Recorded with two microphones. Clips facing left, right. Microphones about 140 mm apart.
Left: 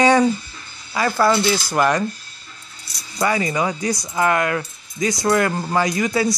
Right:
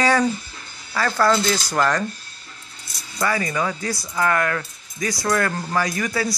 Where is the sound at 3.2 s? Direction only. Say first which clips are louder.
Left 3 dB; 20° left (ahead or behind).